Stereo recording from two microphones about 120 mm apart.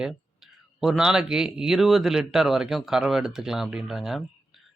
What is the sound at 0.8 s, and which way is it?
Speech, 5° right (ahead or behind).